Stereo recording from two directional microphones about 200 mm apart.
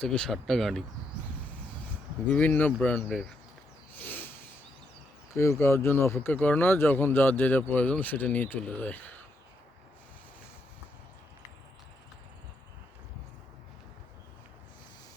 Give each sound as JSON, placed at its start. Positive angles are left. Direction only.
{"t": 0.0, "sound": "speech", "side_deg": 5}
{"t": 2.2, "sound": "speech", "side_deg": 5}
{"t": 3.9, "sound": "a sound", "side_deg": 10}
{"t": 5.3, "sound": "speech", "side_deg": 15}